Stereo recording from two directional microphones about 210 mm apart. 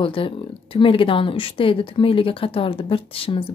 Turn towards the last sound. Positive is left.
turn(degrees=25)  # may be behind; listen again after turning